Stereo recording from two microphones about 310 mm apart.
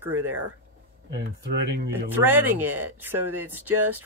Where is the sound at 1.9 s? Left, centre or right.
Centre.